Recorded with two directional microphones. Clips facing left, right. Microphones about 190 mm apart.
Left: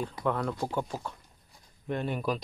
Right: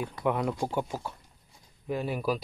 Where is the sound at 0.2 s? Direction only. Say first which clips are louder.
Right 3 dB; 15° right (ahead or behind).